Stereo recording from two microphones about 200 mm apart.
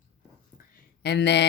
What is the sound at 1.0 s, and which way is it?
Speech, 55° left (ahead or behind).